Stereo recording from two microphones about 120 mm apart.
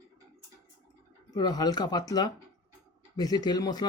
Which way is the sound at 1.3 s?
35° left (ahead or behind).